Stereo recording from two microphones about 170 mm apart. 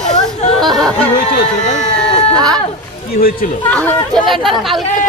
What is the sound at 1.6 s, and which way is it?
Speech, 45° left (ahead or behind).